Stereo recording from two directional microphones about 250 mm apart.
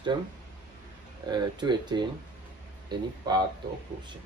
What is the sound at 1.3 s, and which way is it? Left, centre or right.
Speech, centre.